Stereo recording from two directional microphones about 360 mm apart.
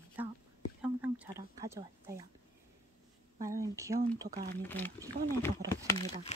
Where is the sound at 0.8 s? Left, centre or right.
Centre.